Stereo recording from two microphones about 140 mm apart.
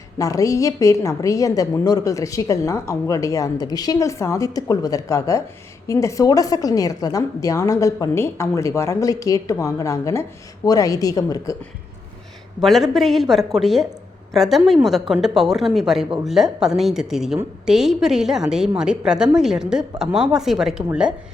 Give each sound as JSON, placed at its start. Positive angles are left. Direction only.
{"t": 0.2, "sound": "a woman's voice", "side_deg": 25}
{"t": 12.6, "sound": "a woman's voice", "side_deg": 0}